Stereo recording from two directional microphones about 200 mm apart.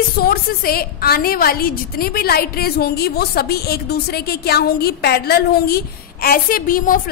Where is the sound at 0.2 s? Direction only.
50° left (ahead or behind).